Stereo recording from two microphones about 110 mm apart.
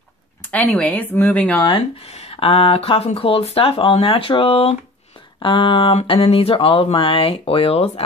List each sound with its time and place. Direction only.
0.5 s speech: 10° left (ahead or behind)
2.0 s speech: 70° left (ahead or behind); by 5.9 s 50° left (ahead or behind)
6.0 s speech: 60° left (ahead or behind)